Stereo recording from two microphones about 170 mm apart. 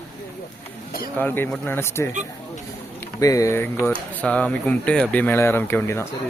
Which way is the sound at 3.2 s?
20° left (ahead or behind).